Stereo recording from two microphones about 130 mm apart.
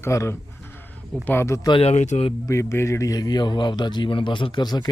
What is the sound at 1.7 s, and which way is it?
Speech, 50° left (ahead or behind).